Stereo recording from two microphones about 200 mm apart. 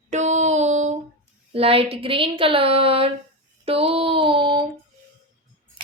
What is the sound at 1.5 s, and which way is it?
Speech, 30° right (ahead or behind).